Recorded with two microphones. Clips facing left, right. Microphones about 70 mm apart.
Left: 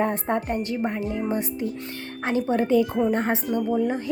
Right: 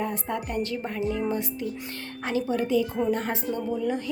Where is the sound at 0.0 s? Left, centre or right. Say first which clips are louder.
Left 6 dB; left.